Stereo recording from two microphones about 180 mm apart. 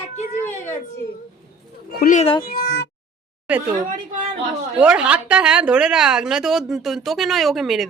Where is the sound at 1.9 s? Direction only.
55° left (ahead or behind).